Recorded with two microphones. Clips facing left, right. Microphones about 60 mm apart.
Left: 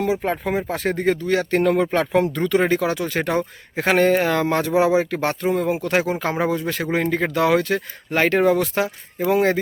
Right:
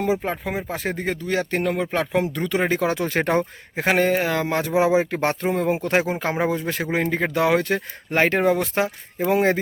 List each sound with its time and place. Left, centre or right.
0.2 s speech: centre
1.6 s speech: centre
2.8 s speech: right
3.8 s speech: centre